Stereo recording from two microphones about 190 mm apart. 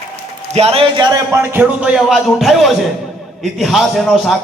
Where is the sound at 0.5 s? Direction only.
30° right (ahead or behind).